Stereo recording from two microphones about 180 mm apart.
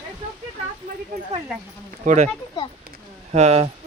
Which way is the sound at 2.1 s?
45° right (ahead or behind).